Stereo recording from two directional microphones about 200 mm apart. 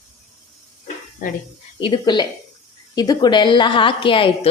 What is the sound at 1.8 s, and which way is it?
A woman's voice, 25° left (ahead or behind).